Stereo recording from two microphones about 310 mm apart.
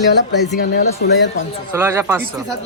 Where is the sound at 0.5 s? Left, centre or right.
Left.